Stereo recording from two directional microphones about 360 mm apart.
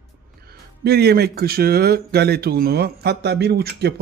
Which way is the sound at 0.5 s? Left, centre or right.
Right.